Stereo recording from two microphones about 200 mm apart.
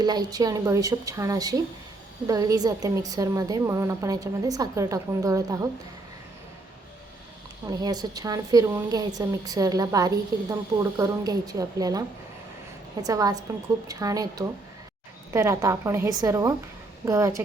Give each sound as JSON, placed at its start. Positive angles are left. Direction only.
{"t": 0.0, "sound": "a woman's voice", "side_deg": -20}
{"t": 7.7, "sound": "a woman's voice", "side_deg": -20}